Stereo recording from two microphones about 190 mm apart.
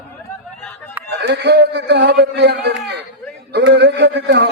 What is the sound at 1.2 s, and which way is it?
A man's voice, 65° right (ahead or behind).